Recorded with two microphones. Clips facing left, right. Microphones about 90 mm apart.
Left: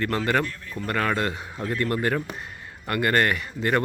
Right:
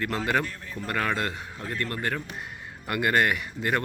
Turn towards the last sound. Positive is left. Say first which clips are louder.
# left 3 dB
turn(degrees=-5)  # may be behind; listen again after turning